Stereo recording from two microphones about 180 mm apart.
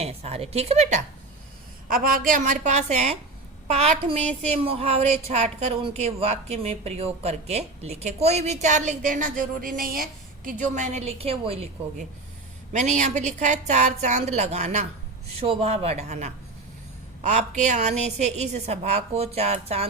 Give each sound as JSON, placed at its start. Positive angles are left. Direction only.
{"t": 0.0, "sound": "a woman's voice", "side_deg": -35}
{"t": 1.9, "sound": "a woman's voice", "side_deg": -50}